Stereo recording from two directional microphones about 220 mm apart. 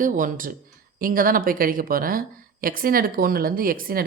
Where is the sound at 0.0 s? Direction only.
35° right (ahead or behind).